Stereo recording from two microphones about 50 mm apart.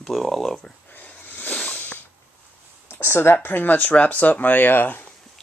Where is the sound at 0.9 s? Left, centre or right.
Left.